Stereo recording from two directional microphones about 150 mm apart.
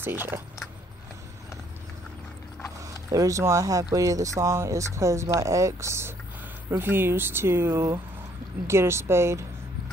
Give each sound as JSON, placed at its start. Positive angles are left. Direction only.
{"t": 0.0, "sound": "speech", "side_deg": -15}
{"t": 2.8, "sound": "speech", "side_deg": -20}